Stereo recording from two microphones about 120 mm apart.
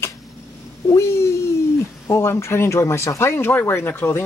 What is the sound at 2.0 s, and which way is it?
Speech, 25° left (ahead or behind).